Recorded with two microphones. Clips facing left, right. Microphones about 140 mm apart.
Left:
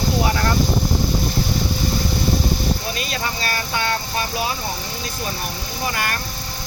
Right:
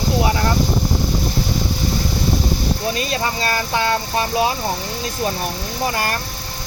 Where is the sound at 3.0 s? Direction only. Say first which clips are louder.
Right 4 dB; 30° right (ahead or behind).